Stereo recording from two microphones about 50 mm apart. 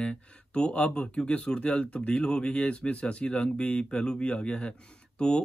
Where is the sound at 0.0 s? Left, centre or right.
Left.